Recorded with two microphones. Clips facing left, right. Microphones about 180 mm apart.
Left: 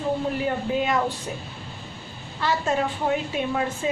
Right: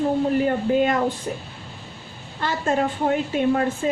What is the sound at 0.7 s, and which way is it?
Speech, 50° right (ahead or behind).